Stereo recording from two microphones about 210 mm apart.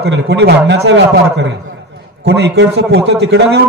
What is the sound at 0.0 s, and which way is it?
A man's voice, 55° right (ahead or behind).